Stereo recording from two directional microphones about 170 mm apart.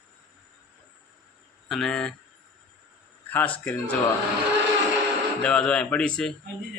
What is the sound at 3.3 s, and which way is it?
Speech, 10° left (ahead or behind).